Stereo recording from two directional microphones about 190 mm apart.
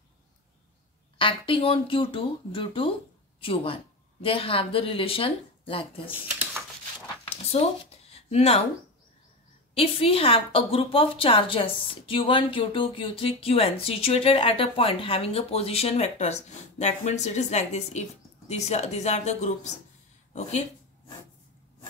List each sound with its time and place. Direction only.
1.1 s a woman's voice: 25° left (ahead or behind)
7.6 s a woman's voice: 25° left (ahead or behind)
8.1 s a sound: 35° left (ahead or behind)
9.8 s a woman's voice: 30° left (ahead or behind)